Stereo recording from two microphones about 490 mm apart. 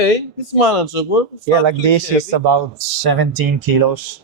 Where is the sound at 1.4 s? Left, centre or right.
Right.